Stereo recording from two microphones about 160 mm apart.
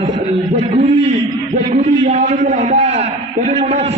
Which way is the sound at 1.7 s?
40° right (ahead or behind).